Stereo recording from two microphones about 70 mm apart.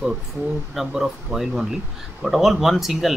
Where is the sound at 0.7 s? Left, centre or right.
Centre.